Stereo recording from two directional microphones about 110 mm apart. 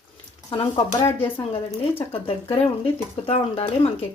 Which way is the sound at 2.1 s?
60° left (ahead or behind).